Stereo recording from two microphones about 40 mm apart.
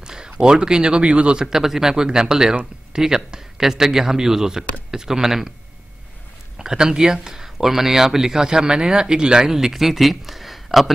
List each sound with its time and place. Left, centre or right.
0.0 s speech: right
1.4 s speech: centre
6.6 s speech: centre